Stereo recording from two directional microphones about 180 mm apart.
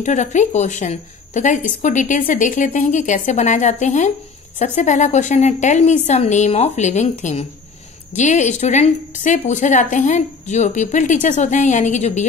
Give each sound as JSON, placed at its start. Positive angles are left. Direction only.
{"t": 0.0, "sound": "a woman's voice", "side_deg": 40}